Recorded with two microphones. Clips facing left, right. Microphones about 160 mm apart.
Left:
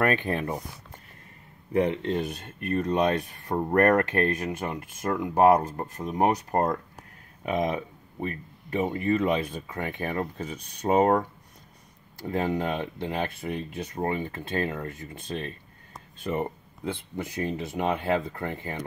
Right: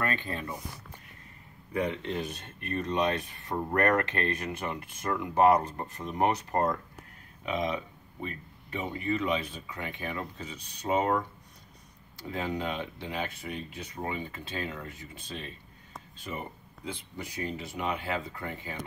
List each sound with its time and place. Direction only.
0.0 s speech: 60° left (ahead or behind)
2.2 s speech: 50° left (ahead or behind)